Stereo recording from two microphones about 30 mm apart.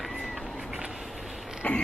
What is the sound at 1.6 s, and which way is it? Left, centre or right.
Mechanisms, left.